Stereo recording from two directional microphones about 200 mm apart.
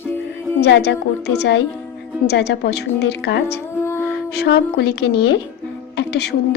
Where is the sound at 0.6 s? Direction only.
55° left (ahead or behind).